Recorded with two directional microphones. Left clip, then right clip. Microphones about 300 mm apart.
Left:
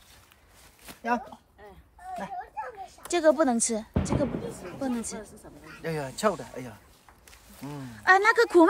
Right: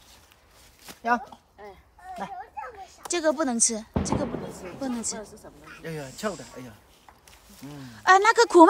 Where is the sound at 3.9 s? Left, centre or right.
Right.